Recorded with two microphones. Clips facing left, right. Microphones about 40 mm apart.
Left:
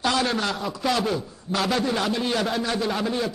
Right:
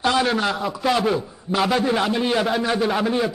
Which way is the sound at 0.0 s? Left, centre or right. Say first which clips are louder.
Right 4 dB; centre.